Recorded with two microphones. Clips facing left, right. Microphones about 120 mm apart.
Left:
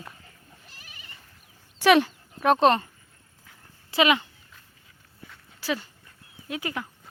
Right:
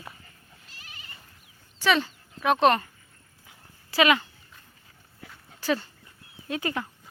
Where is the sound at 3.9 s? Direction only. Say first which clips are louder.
Even; 20° left (ahead or behind).